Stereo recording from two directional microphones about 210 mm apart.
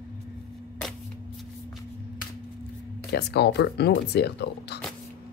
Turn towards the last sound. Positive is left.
turn(degrees=50)  # may be behind; listen again after turning